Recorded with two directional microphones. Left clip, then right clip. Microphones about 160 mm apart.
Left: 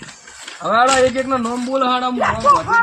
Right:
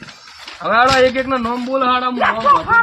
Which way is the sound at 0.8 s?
5° left (ahead or behind).